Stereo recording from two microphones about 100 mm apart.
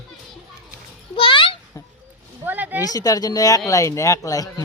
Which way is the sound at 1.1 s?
60° left (ahead or behind).